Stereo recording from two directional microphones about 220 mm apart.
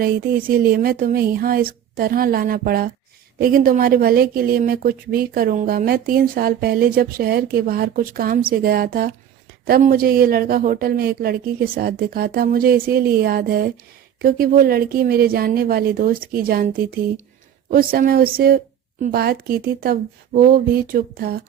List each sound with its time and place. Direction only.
0.0 s speech: 40° right (ahead or behind)